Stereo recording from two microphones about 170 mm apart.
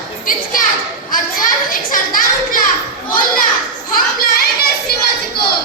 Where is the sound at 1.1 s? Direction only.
55° left (ahead or behind).